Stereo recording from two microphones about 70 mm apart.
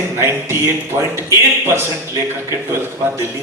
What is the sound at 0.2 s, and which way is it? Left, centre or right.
A man's voice, right.